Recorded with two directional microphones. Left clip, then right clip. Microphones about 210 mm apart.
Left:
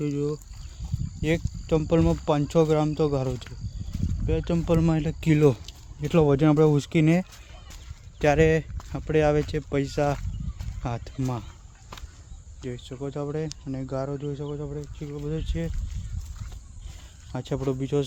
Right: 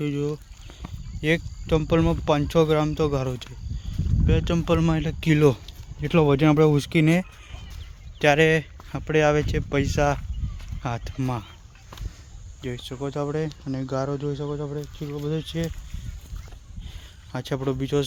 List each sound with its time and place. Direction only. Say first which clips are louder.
0.0 s speech: right 1 dB; centre (ahead or behind)
12.6 s speech: right 3 dB; 25° right (ahead or behind); by 15.7 s 40° right (ahead or behind)
17.3 s speech: right 1 dB; centre (ahead or behind)